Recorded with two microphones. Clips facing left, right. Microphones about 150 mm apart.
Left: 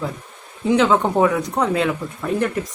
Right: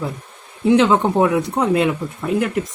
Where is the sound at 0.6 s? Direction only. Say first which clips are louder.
Right 2 dB; 5° right (ahead or behind).